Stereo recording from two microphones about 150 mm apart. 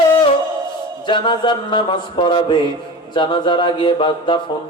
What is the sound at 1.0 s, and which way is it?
Mantra, 30° left (ahead or behind).